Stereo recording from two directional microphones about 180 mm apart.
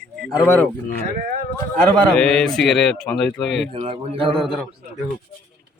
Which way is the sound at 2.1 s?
5° left (ahead or behind).